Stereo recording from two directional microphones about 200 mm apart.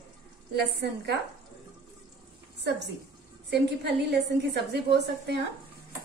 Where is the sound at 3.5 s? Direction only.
60° right (ahead or behind).